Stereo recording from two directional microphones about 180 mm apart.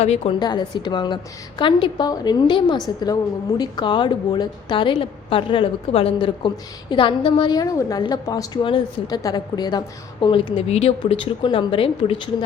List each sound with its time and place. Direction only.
0.0 s a woman's voice: 35° left (ahead or behind)
0.3 s a woman's voice: 25° left (ahead or behind)